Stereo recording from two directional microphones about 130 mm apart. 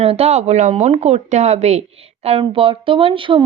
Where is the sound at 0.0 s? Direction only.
50° right (ahead or behind).